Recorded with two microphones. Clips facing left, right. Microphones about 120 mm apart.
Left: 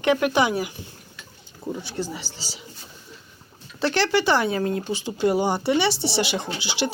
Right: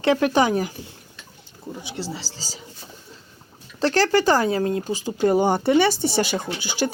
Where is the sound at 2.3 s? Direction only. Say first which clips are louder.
Right 1 dB; 40° right (ahead or behind).